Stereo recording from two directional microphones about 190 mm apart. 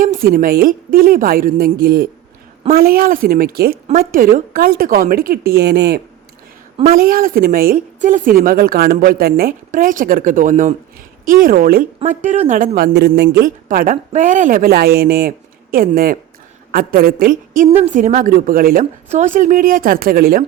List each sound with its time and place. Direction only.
0.0 s speech: 50° right (ahead or behind)
12.0 s speech: 40° right (ahead or behind)